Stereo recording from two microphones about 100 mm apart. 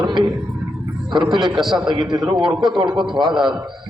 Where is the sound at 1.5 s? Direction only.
5° right (ahead or behind).